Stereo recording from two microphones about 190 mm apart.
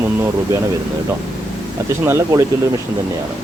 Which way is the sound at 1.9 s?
15° right (ahead or behind).